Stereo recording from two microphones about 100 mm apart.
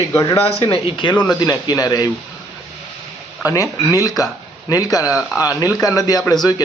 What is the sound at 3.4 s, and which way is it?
A man's voice, 35° left (ahead or behind).